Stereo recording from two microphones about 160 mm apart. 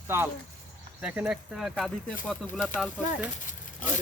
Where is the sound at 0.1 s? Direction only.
15° right (ahead or behind).